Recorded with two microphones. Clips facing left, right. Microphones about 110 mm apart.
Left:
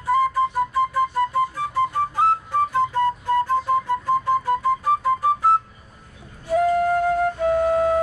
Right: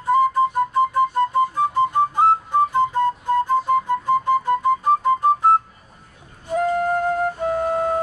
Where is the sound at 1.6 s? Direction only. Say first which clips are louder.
Right 4 dB; centre (ahead or behind).